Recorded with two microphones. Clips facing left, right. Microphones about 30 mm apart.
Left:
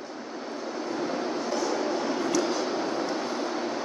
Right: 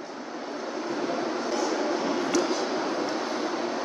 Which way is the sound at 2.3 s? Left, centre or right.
Centre.